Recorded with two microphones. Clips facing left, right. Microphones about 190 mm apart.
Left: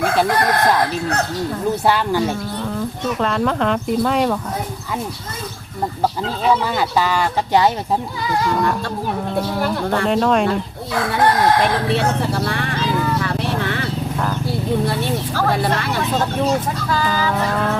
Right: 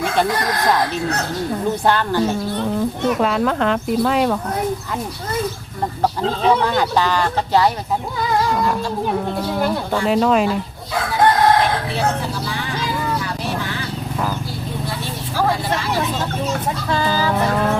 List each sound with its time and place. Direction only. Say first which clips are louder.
1.9 s speech: even; 10° left (ahead or behind)
3.2 s speech: left 3 dB; 5° right (ahead or behind)
6.4 s speech: right 1 dB; 5° left (ahead or behind)
9.5 s speech: right 2 dB; 10° right (ahead or behind)
11.9 s vehicle: left 2 dB; 65° left (ahead or behind)
16.9 s music: right 1 dB; 30° right (ahead or behind)